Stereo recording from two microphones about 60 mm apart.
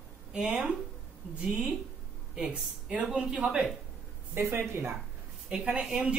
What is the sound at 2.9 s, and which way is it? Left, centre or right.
Speech, centre.